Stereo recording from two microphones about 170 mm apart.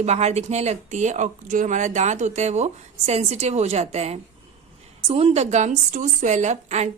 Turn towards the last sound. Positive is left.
turn(degrees=-40)  # may be behind; listen again after turning